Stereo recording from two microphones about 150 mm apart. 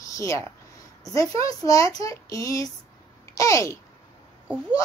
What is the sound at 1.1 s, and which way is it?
A woman's voice, 20° left (ahead or behind).